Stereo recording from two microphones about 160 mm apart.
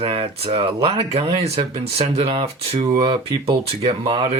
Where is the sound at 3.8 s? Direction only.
30° right (ahead or behind).